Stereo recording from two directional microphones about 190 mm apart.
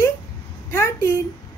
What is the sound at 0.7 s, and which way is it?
Speech, 15° left (ahead or behind).